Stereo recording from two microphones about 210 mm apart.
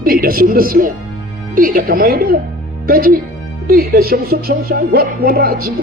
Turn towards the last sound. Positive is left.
turn(degrees=-45)  # may be behind; listen again after turning